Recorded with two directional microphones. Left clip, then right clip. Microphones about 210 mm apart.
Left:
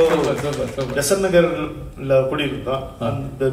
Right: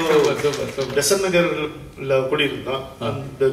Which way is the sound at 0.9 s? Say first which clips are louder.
Left 2 dB; 50° left (ahead or behind).